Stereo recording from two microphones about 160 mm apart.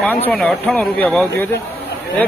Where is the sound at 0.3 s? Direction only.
5° left (ahead or behind).